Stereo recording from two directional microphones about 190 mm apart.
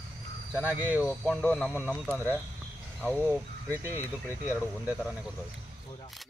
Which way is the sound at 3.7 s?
15° right (ahead or behind).